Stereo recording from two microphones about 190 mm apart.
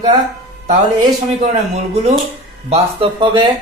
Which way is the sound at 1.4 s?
35° right (ahead or behind).